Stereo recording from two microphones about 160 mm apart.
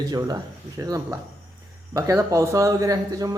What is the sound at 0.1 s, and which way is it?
A man's voice, 25° right (ahead or behind).